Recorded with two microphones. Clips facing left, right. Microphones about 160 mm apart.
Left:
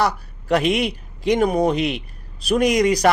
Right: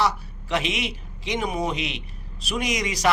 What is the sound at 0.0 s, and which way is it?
A man's voice, 45° left (ahead or behind).